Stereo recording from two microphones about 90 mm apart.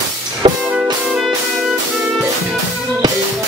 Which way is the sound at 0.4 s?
85° right.